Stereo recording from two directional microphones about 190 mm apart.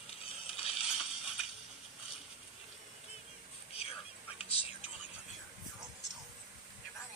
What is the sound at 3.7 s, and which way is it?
Whispering, 30° left (ahead or behind).